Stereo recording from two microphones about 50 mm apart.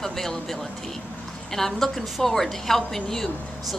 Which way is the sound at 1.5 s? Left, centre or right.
Centre.